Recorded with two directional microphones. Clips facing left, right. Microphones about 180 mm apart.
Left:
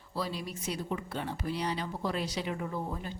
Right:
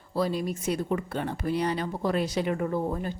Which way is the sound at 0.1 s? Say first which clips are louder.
Right 8 dB; 50° right (ahead or behind).